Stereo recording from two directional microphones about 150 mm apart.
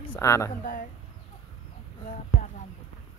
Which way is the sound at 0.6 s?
65° left (ahead or behind).